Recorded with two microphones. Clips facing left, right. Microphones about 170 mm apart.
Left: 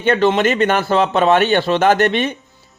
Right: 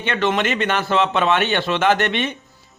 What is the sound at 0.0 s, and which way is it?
A man's voice, 40° left (ahead or behind).